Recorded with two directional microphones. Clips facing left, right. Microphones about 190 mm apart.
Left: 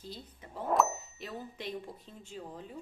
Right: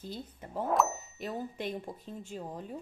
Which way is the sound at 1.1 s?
55° right (ahead or behind).